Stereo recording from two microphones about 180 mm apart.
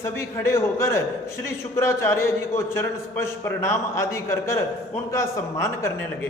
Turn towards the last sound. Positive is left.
turn(degrees=15)  # may be behind; listen again after turning